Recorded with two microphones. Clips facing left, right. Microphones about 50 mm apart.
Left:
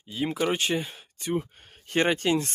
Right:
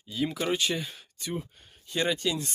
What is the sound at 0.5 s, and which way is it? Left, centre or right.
Speech, left.